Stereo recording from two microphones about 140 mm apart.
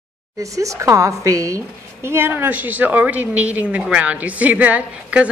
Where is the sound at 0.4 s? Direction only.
20° right (ahead or behind).